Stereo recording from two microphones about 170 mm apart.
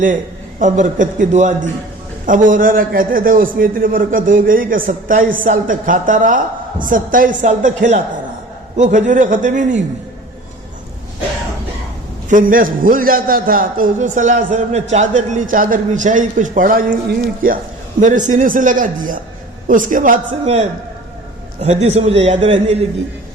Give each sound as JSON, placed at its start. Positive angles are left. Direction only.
{"t": 0.6, "sound": "a man's voice", "side_deg": -45}
{"t": 12.3, "sound": "a man's voice", "side_deg": -55}